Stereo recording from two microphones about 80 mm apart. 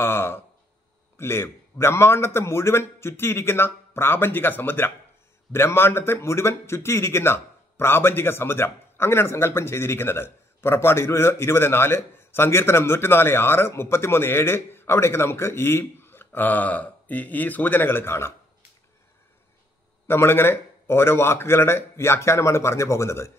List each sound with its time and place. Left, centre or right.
0.0 s speech: left
20.1 s speech: left